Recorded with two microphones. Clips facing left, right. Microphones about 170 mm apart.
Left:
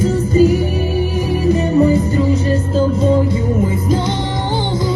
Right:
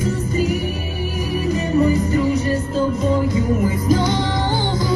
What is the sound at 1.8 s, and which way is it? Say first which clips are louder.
Music: left 1 dB; 30° left (ahead or behind).